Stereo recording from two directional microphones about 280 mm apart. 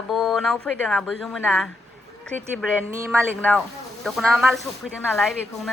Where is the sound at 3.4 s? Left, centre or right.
Centre.